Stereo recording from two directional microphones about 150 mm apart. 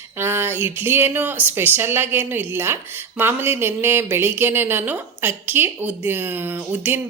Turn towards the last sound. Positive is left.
turn(degrees=-15)  # may be behind; listen again after turning